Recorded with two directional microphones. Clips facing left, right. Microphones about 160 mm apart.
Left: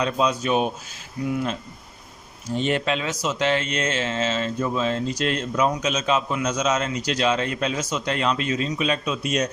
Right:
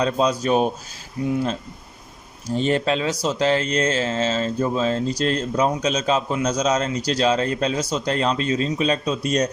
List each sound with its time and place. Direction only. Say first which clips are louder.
0.0 s speech: right 2 dB; 35° right (ahead or behind)
1.2 s speech: right 3 dB; 30° right (ahead or behind)
2.6 s speech: right 3 dB; 35° right (ahead or behind)